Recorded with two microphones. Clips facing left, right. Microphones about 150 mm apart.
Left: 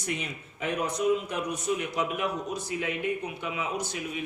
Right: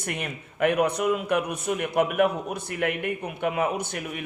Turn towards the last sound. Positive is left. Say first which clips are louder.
# right 2 dB
turn(degrees=-60)  # may be behind; listen again after turning